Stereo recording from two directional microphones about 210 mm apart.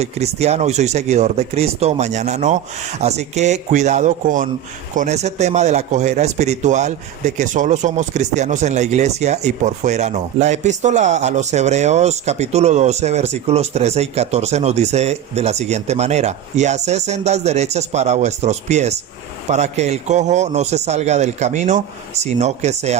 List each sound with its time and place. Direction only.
0.0 s speech: 30° right (ahead or behind)